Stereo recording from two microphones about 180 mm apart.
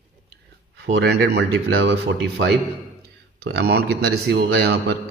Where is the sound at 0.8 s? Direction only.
70° right (ahead or behind).